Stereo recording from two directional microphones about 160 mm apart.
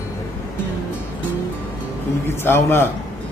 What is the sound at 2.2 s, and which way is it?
Speech, 15° left (ahead or behind).